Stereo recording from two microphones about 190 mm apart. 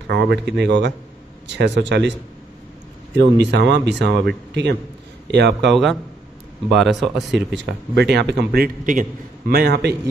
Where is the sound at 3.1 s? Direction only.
65° right (ahead or behind).